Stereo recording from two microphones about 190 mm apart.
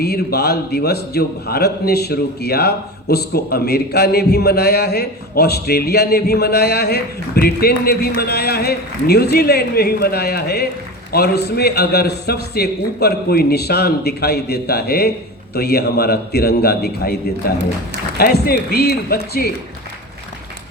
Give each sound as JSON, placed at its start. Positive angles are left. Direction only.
{"t": 0.0, "sound": "a man's voice", "side_deg": 55}
{"t": 18.2, "sound": "a man's voice", "side_deg": 55}